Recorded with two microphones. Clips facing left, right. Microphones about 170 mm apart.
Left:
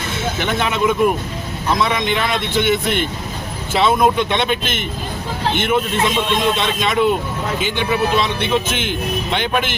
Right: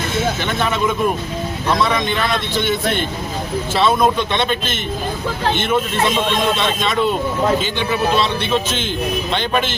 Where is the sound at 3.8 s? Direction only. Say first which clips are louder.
Left 1 dB; 15° left (ahead or behind).